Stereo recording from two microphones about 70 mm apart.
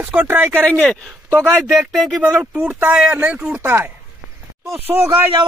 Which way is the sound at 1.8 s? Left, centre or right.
Centre.